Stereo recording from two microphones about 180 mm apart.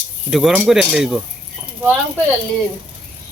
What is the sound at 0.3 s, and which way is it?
Speech, 5° right (ahead or behind).